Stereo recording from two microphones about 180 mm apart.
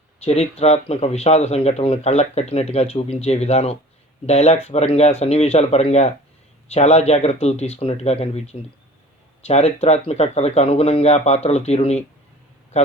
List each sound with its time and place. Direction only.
0.3 s a man's voice: 35° left (ahead or behind)